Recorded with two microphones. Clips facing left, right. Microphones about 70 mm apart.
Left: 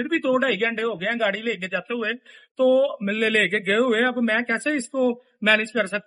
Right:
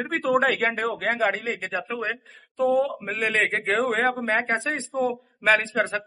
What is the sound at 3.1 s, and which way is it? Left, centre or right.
A man's voice, centre.